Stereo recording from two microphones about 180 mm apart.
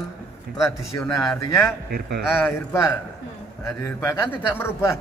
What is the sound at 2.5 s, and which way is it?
A man's voice, 15° left (ahead or behind).